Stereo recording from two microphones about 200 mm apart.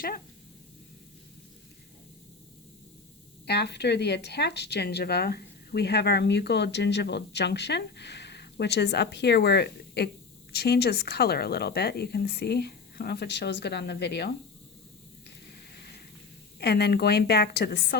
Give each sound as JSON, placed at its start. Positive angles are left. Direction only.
{"t": 3.4, "sound": "a woman's voice", "side_deg": 55}
{"t": 16.6, "sound": "a woman's voice", "side_deg": 55}